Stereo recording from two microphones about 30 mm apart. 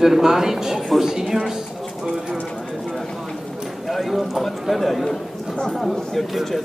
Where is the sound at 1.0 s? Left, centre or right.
Centre.